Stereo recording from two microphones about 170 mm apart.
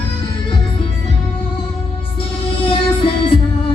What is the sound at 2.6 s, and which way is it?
Music, 30° left (ahead or behind).